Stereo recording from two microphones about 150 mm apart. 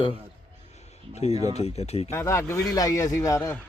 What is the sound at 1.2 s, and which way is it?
Speech, 45° left (ahead or behind).